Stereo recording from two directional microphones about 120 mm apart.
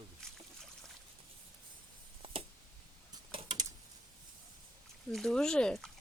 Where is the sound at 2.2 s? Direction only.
50° right (ahead or behind).